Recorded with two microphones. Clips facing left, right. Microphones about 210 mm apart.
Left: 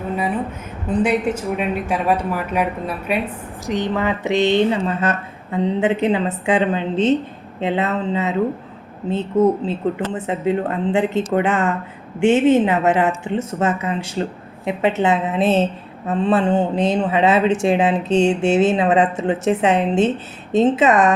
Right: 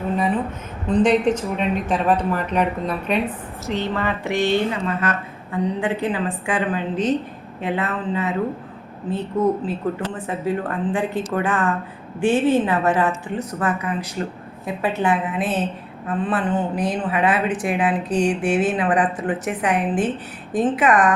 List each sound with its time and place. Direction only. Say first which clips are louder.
0.9 s a woman's voice: right 2 dB; 10° left (ahead or behind); by 21.1 s 25° left (ahead or behind)